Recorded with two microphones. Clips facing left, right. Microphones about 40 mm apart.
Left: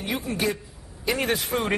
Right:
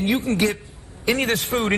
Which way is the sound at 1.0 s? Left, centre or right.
Right.